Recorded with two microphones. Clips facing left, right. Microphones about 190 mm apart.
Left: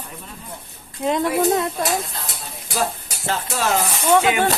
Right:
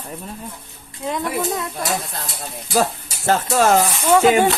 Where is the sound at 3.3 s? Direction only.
45° right (ahead or behind).